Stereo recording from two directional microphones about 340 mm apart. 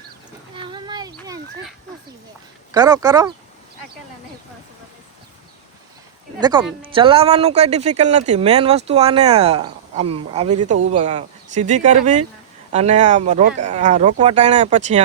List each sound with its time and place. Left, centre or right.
0.5 s a sound: centre
2.7 s speech: centre
6.4 s speech: centre